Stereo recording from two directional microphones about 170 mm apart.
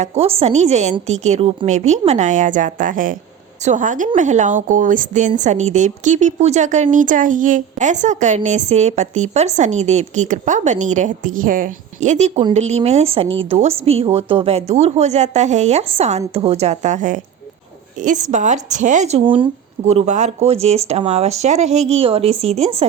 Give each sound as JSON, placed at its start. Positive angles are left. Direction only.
{"t": 0.0, "sound": "a woman's voice", "side_deg": -40}
{"t": 19.9, "sound": "speech", "side_deg": -40}